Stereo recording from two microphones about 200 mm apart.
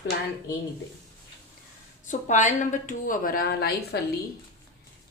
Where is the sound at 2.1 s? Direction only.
35° left (ahead or behind).